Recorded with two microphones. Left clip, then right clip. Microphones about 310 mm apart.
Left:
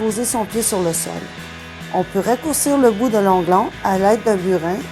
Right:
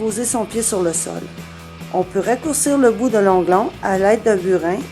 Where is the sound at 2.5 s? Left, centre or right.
Left.